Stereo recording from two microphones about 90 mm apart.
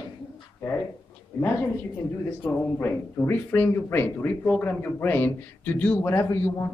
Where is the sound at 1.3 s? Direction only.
25° left (ahead or behind).